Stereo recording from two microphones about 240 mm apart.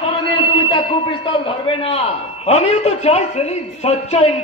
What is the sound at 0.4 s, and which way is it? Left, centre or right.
A man's voice, left.